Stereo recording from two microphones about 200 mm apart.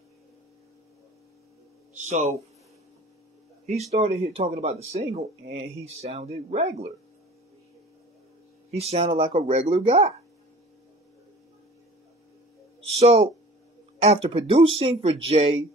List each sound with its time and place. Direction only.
2.0 s speech: 35° right (ahead or behind)
3.6 s speech: 35° right (ahead or behind)
5.4 s speech: 55° right (ahead or behind)
5.9 s speech: 35° right (ahead or behind)
8.7 s speech: 30° right (ahead or behind)
12.9 s speech: 30° right (ahead or behind)